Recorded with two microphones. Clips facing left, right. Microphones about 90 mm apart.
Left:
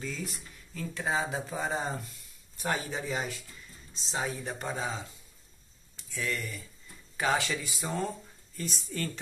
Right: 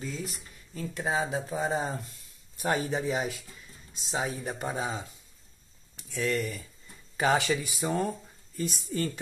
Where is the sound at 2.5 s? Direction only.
20° right (ahead or behind).